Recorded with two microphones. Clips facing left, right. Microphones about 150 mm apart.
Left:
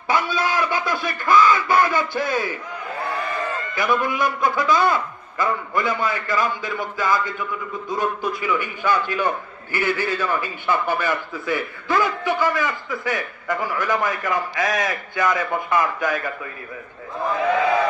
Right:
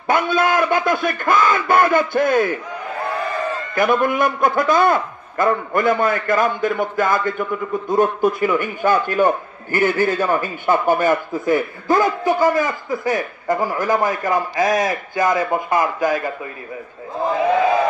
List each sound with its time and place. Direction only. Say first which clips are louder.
0.0 s a man's voice: right 5 dB; 50° right (ahead or behind)
3.7 s a man's voice: right 5 dB; 50° right (ahead or behind); by 16.2 s 35° right (ahead or behind)
17.2 s speech: right 4 dB; 30° right (ahead or behind)